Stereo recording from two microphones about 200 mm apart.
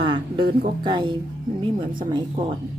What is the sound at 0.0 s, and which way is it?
Speech, 25° right (ahead or behind).